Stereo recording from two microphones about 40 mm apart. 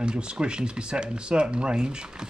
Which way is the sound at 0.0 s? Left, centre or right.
Right.